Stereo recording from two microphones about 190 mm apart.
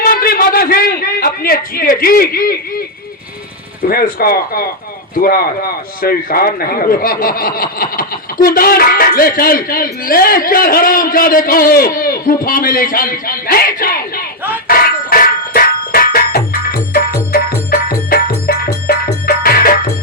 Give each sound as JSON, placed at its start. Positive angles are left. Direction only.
{"t": 0.0, "sound": "a sound", "side_deg": 50}
{"t": 3.8, "sound": "a man's voice", "side_deg": 50}
{"t": 14.7, "sound": "music", "side_deg": 50}